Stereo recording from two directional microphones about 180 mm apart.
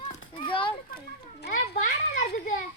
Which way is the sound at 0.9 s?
55° left (ahead or behind).